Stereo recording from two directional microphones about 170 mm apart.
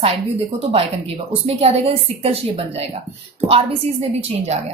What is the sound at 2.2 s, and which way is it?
Speech, 35° right (ahead or behind).